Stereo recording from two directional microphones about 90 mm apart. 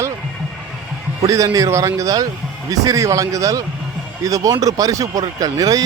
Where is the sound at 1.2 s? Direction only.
40° right (ahead or behind).